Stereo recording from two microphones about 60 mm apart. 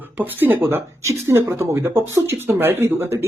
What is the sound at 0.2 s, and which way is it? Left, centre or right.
Speech, right.